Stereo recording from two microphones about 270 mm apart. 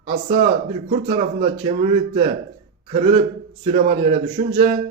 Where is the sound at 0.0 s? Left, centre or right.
Right.